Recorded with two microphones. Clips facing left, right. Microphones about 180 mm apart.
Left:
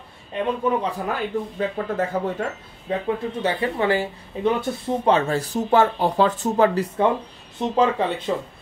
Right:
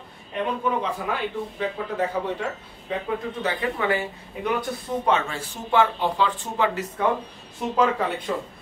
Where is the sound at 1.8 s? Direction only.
45° left (ahead or behind).